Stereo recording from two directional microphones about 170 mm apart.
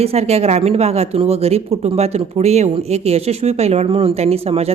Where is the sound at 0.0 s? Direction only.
35° right (ahead or behind).